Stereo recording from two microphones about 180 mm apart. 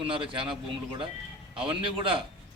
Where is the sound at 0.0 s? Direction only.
30° right (ahead or behind).